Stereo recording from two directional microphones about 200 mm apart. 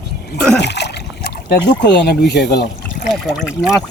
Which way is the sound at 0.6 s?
60° left (ahead or behind).